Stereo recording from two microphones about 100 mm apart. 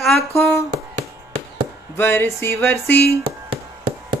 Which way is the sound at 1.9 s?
25° left (ahead or behind).